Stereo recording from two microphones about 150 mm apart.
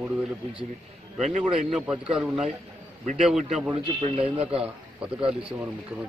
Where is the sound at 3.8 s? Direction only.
45° right (ahead or behind).